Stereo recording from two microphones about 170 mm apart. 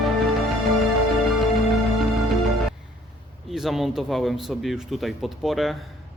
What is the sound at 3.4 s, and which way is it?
Speech, centre (ahead or behind).